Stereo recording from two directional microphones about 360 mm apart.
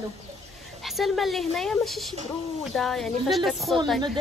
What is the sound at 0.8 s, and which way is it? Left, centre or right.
Speech, centre.